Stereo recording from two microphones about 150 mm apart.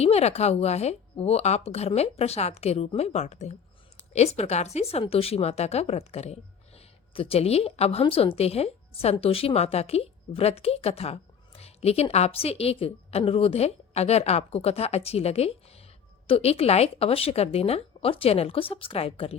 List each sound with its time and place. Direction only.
0.0 s speech: 45° left (ahead or behind)